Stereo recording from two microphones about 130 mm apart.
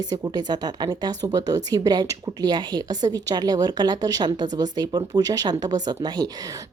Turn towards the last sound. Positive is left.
turn(degrees=-30)  # may be behind; listen again after turning